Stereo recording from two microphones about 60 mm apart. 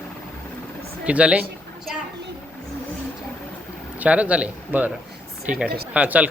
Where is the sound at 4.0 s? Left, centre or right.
Right.